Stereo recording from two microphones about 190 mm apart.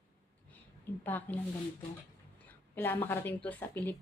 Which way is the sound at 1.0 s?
10° left (ahead or behind).